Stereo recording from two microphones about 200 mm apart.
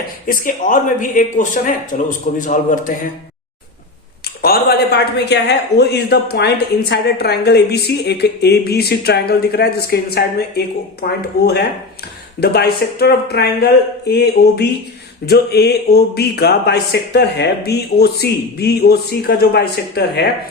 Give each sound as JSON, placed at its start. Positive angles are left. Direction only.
{"t": 0.3, "sound": "speech", "side_deg": 40}
{"t": 4.4, "sound": "a woman's voice", "side_deg": 50}